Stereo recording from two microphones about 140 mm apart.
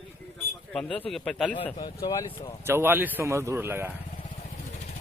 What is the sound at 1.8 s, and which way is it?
Speech, 30° left (ahead or behind).